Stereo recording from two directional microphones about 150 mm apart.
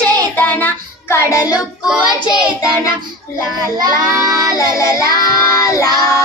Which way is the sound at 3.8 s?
25° right (ahead or behind).